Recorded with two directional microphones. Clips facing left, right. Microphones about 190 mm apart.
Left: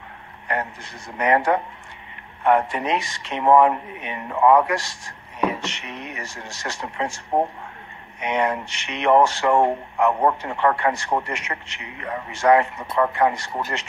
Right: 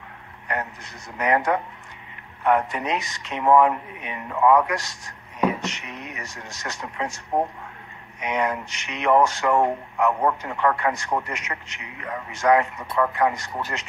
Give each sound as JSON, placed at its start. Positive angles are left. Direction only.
{"t": 0.5, "sound": "speech", "side_deg": 30}